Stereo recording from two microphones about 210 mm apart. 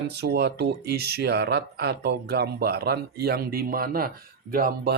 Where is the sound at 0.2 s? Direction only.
50° right (ahead or behind).